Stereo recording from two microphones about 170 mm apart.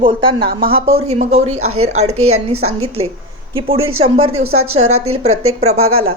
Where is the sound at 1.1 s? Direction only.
40° right (ahead or behind).